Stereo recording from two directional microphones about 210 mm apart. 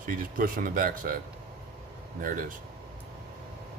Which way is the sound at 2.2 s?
40° right (ahead or behind).